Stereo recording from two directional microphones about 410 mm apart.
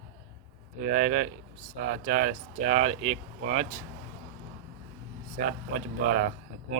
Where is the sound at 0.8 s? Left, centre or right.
Centre.